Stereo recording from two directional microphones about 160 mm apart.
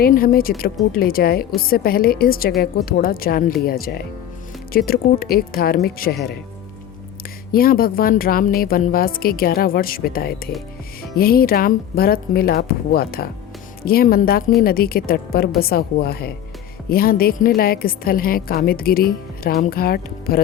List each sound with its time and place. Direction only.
0.0 s a woman's voice: 65° left (ahead or behind)
7.5 s a woman's voice: 65° left (ahead or behind)